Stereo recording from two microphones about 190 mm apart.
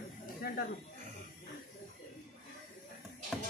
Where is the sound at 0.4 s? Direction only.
50° left (ahead or behind).